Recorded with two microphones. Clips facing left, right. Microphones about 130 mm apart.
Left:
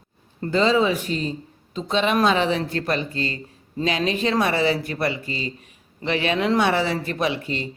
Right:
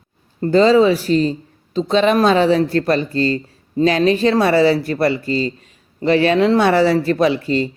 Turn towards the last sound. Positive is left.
turn(degrees=-35)  # may be behind; listen again after turning